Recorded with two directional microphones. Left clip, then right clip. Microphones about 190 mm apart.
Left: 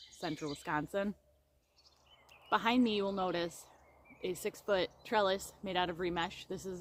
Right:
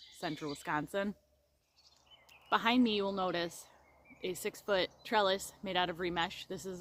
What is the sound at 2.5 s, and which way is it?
Speech, 15° right (ahead or behind).